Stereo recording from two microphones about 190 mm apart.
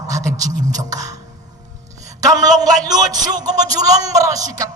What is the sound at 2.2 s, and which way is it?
A man's voice, 20° right (ahead or behind).